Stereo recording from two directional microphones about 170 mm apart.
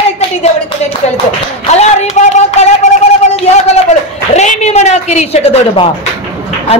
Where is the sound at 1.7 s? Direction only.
40° left (ahead or behind).